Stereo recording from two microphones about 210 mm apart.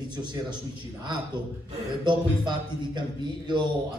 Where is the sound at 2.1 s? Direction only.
20° right (ahead or behind).